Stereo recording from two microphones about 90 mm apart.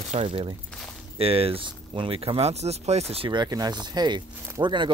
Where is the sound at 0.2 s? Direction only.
90° right.